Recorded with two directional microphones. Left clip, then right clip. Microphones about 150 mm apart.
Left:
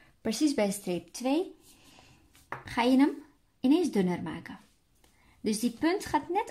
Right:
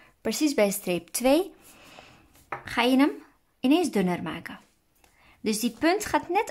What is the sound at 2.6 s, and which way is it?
A woman's voice, 10° right (ahead or behind).